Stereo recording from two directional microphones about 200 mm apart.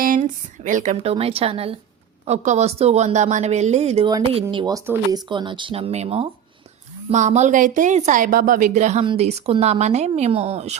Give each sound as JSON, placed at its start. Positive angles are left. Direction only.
{"t": 0.0, "sound": "speech", "side_deg": -40}
{"t": 1.1, "sound": "speech", "side_deg": -30}
{"t": 4.4, "sound": "speech", "side_deg": -20}